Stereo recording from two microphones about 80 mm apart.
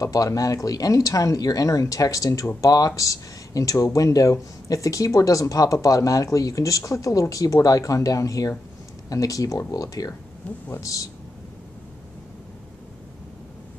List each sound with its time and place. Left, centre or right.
0.0 s speech: left